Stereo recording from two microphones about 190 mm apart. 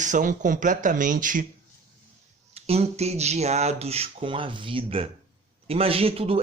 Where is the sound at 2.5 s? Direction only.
35° right (ahead or behind).